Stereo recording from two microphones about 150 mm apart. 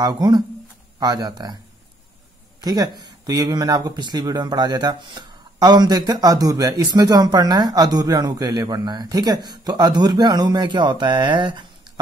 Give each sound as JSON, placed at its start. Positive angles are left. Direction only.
{"t": 0.0, "sound": "speech", "side_deg": -25}
{"t": 2.6, "sound": "speech", "side_deg": -25}